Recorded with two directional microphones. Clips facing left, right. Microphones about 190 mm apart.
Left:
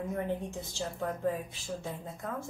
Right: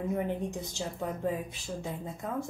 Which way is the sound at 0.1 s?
15° right (ahead or behind).